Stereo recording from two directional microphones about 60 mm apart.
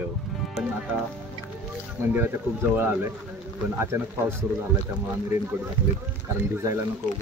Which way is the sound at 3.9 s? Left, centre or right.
Right.